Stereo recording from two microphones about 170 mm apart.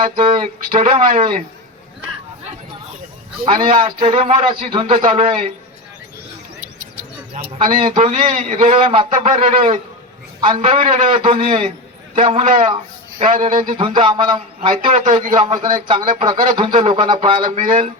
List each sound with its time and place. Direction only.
0.0 s a man's voice: 30° right (ahead or behind)
3.4 s a man's voice: 30° right (ahead or behind)
6.6 s bird: 50° right (ahead or behind)
7.6 s a man's voice: 30° right (ahead or behind)
8.2 s a man's voice: 50° right (ahead or behind)
8.7 s a man's voice: 35° right (ahead or behind)
13.1 s a man's voice: 45° right (ahead or behind)
13.4 s a man's voice: 30° right (ahead or behind)